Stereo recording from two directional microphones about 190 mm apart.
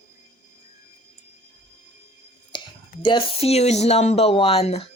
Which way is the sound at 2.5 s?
25° left (ahead or behind).